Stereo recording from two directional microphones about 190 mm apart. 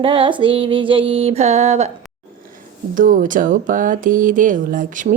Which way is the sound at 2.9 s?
45° right (ahead or behind).